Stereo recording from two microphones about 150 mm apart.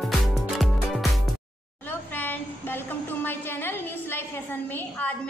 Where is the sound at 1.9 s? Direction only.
15° left (ahead or behind).